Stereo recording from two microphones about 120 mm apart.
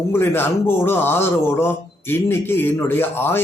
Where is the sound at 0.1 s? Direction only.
20° left (ahead or behind).